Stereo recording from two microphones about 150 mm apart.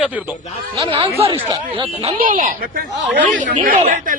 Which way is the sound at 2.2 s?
65° right (ahead or behind).